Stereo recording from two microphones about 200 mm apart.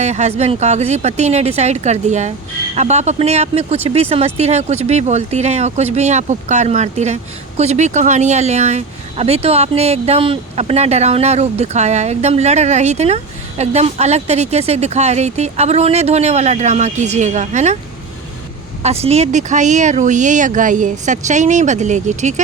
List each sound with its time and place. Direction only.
0.0 s speech: 35° right (ahead or behind)
18.8 s speech: 30° right (ahead or behind)